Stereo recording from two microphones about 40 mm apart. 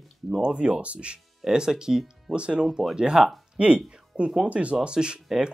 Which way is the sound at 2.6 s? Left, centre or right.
Centre.